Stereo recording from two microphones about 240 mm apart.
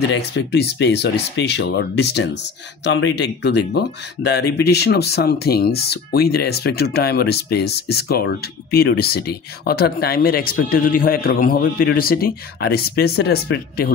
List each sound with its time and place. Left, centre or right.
0.1 s speech: left